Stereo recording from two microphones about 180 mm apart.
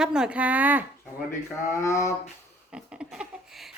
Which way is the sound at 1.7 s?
15° left (ahead or behind).